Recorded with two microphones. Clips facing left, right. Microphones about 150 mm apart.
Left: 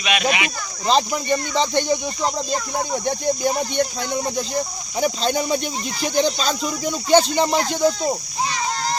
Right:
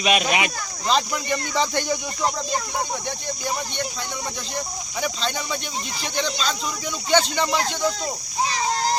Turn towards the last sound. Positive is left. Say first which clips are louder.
# left 5 dB
turn(degrees=40)  # may be behind; listen again after turning